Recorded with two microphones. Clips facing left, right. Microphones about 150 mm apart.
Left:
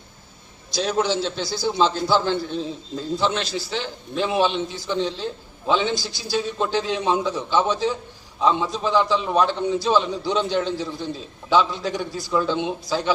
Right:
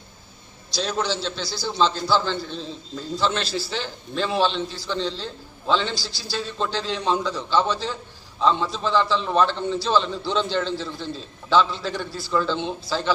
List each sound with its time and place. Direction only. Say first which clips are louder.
0.8 s a man's voice: left 4 dB; 10° left (ahead or behind)
1.0 s a man's voice: left 3 dB; 50° left (ahead or behind)
3.2 s a man's voice: right 1 dB; 15° left (ahead or behind)